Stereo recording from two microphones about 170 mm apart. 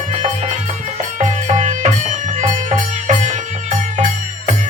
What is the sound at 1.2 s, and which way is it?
Music, 45° right (ahead or behind).